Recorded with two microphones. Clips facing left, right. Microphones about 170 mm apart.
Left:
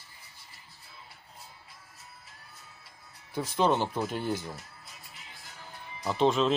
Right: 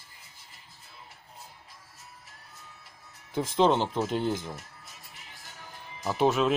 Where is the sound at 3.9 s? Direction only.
20° right (ahead or behind).